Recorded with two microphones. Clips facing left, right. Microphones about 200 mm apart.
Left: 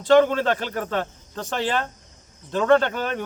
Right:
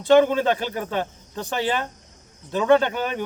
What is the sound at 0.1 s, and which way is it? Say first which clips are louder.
Speech: even; 10° right (ahead or behind).